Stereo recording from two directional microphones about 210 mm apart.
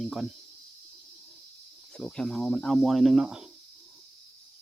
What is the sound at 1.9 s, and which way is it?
Speech, 5° left (ahead or behind).